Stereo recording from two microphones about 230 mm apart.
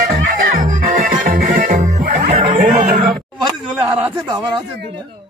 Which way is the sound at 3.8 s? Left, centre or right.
Centre.